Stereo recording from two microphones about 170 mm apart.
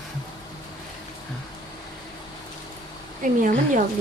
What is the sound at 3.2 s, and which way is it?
Speech, 50° right (ahead or behind).